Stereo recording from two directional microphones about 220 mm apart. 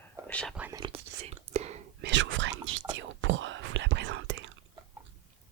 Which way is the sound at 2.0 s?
55° right (ahead or behind).